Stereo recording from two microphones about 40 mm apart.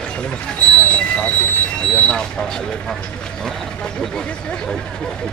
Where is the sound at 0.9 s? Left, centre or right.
Left.